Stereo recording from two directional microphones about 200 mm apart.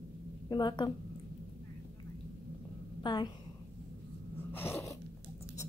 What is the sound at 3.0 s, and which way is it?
Speech, 20° left (ahead or behind).